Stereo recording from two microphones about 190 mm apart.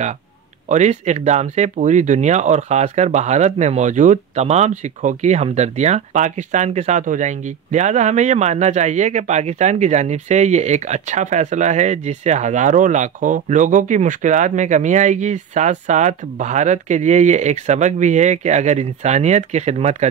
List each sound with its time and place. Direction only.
0.7 s speech: 40° right (ahead or behind)